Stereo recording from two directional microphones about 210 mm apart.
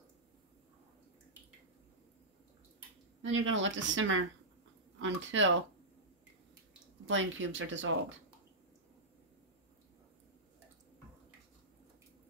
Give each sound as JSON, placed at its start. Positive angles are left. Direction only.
{"t": 3.2, "sound": "speech", "side_deg": -65}
{"t": 7.1, "sound": "speech", "side_deg": -65}